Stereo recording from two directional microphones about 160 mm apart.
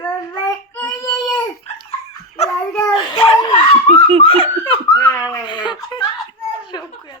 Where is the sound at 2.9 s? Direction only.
30° left (ahead or behind).